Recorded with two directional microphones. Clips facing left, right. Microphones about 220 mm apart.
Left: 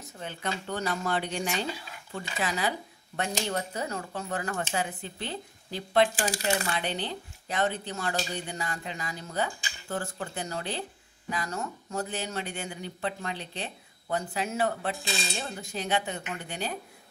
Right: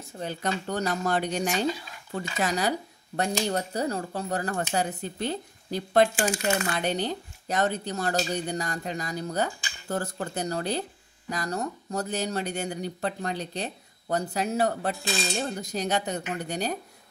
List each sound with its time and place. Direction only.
0.2 s speech: 40° right (ahead or behind)